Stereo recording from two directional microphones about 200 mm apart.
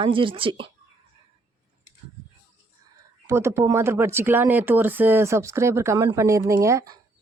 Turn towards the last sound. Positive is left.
turn(degrees=-15)  # may be behind; listen again after turning